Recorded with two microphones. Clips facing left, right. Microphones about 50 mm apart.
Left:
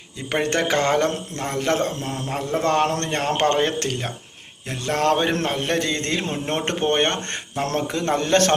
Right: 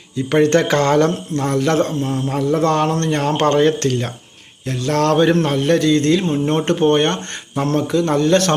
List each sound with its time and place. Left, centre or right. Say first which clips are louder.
0.3 s speech: right 7 dB; centre
2.0 s a man's voice: right 8 dB; centre
2.3 s speech: right 4 dB; left